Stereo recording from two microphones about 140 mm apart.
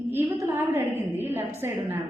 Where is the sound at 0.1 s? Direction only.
20° right (ahead or behind).